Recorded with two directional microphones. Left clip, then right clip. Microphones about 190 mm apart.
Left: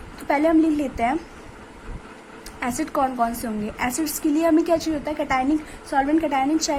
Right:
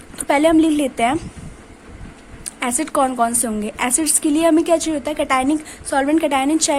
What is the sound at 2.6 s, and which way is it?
A woman's voice, 45° right (ahead or behind).